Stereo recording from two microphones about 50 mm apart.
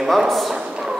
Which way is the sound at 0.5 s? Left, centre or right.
Centre.